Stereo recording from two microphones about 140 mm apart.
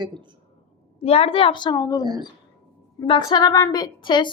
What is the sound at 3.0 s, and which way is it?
A woman's voice, 35° left (ahead or behind).